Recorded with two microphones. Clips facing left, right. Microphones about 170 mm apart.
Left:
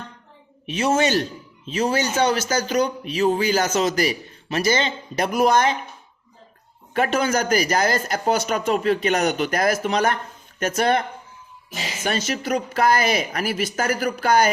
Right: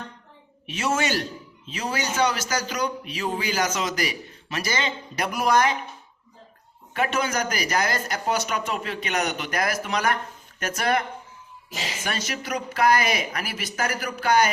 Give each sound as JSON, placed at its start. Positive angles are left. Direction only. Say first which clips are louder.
{"t": 0.7, "sound": "a man's voice", "louder": "left 5 dB", "side_deg": 20}
{"t": 6.9, "sound": "speech", "louder": "left 4 dB", "side_deg": 35}
{"t": 8.1, "sound": "a man's voice", "louder": "left 4 dB", "side_deg": 45}
{"t": 12.0, "sound": "a man's voice", "louder": "left 8 dB", "side_deg": 25}